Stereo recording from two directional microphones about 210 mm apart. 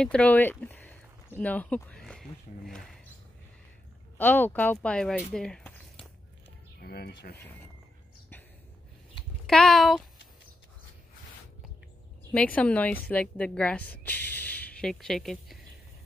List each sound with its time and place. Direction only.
0.0 s speech: 5° left (ahead or behind)
4.2 s speech: 10° left (ahead or behind)
6.8 s speech: 50° left (ahead or behind)
9.5 s speech: 5° left (ahead or behind)
12.3 s a woman's voice: 5° left (ahead or behind)
14.3 s a sound: 10° left (ahead or behind)